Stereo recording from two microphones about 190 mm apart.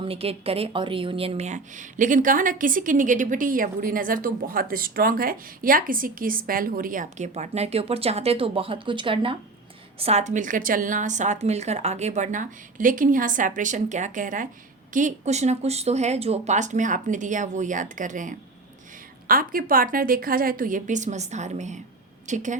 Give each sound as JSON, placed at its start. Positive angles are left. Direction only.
{"t": 0.0, "sound": "a woman's voice", "side_deg": -30}